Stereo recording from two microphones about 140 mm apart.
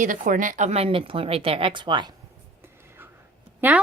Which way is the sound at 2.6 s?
15° right (ahead or behind).